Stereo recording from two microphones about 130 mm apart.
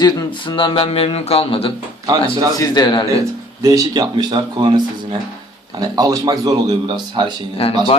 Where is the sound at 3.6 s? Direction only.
30° right (ahead or behind).